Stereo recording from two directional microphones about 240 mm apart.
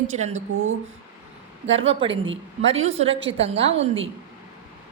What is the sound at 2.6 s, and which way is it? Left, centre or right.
Speech, right.